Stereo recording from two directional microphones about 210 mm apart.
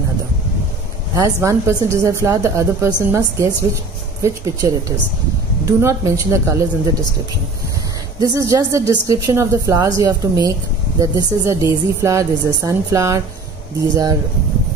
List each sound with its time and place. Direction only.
1.1 s speech: 15° right (ahead or behind)
8.2 s speech: 15° right (ahead or behind)